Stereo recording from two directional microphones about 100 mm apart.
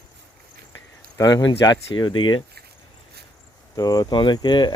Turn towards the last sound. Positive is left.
turn(degrees=50)  # may be behind; listen again after turning